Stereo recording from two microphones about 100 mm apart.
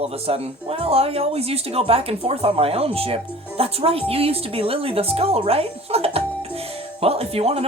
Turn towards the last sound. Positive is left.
turn(degrees=-90)